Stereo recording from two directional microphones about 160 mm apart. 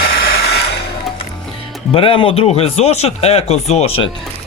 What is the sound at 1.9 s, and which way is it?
Speech, 35° left (ahead or behind).